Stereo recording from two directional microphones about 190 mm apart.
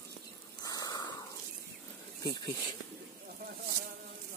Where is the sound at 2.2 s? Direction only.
20° left (ahead or behind).